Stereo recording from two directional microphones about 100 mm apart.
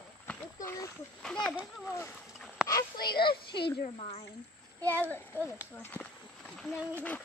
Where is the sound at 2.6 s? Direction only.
5° right (ahead or behind).